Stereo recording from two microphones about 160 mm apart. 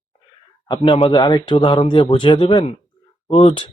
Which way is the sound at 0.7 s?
35° left (ahead or behind).